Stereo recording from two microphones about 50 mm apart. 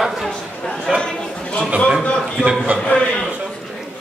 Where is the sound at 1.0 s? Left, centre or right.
Centre.